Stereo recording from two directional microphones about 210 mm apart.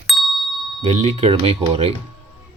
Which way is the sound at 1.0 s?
30° right (ahead or behind).